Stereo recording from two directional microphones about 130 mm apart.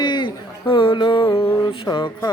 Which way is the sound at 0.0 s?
35° left (ahead or behind).